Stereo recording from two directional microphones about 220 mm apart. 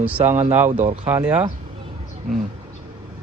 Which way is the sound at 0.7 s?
35° right (ahead or behind).